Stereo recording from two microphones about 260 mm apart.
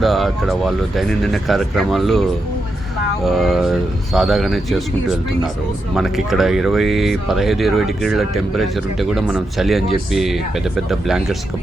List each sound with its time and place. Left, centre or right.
0.0 s speech: centre
3.2 s speech: centre
5.9 s speech: centre